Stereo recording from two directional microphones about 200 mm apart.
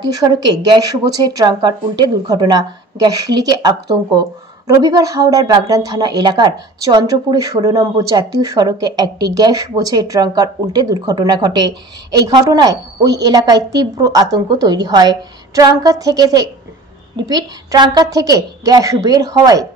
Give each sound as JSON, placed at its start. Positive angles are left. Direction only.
{"t": 0.0, "sound": "speech", "side_deg": -20}